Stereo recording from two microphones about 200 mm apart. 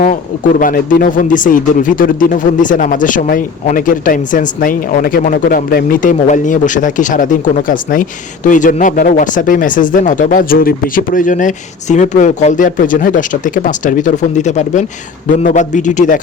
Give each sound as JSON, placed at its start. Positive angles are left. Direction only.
{"t": 0.0, "sound": "speech", "side_deg": 45}